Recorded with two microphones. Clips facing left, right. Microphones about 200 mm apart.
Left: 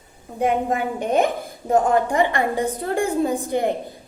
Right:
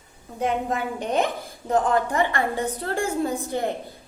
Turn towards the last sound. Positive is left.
turn(degrees=15)  # may be behind; listen again after turning